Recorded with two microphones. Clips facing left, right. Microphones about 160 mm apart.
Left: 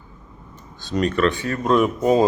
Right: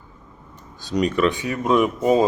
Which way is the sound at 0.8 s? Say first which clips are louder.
Even; 10° right (ahead or behind).